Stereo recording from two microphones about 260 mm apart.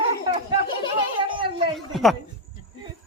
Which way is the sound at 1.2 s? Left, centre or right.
Centre.